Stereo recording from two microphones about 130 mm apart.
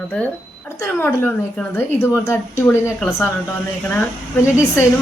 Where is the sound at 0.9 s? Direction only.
15° left (ahead or behind).